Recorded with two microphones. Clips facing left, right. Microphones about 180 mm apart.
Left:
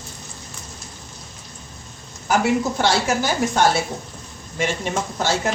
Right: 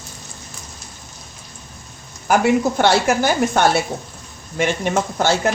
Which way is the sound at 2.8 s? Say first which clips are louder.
Right 4 dB; 60° right (ahead or behind).